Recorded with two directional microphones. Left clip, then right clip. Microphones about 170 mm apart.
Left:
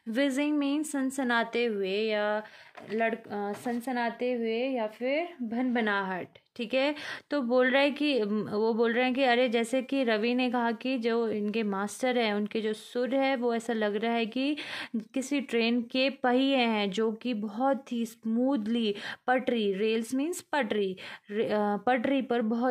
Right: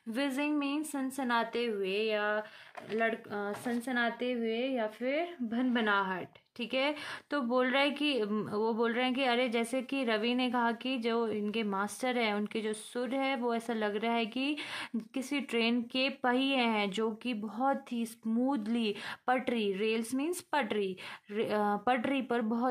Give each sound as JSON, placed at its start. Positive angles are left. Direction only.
{"t": 0.1, "sound": "a woman's voice", "side_deg": 30}